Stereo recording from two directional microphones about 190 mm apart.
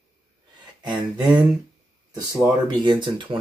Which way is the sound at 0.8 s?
25° right (ahead or behind).